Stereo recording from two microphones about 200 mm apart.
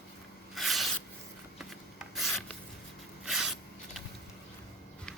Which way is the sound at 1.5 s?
Centre (ahead or behind).